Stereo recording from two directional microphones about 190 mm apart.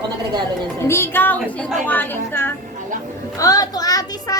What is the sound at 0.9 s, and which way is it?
A woman's voice, 10° left (ahead or behind).